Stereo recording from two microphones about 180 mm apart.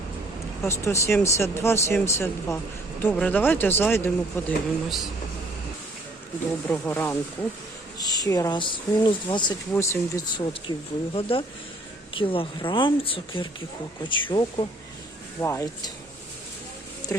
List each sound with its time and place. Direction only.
0.7 s speech: 15° left (ahead or behind)
6.7 s speech: 10° left (ahead or behind)
9.7 s speech: 15° left (ahead or behind)
15.4 s speech: 15° left (ahead or behind)
17.1 s speech: 15° left (ahead or behind)